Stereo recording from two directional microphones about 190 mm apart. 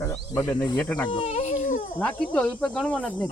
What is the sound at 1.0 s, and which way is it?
Speech, 30° left (ahead or behind).